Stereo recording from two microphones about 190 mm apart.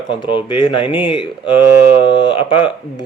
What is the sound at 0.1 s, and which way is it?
Speech, 25° left (ahead or behind).